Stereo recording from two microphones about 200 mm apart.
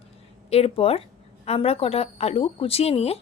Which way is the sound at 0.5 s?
30° left (ahead or behind).